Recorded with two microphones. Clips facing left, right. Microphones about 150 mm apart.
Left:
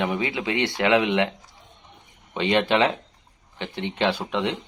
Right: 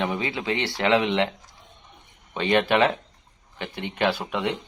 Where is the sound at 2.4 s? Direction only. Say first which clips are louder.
Even; 20° left (ahead or behind).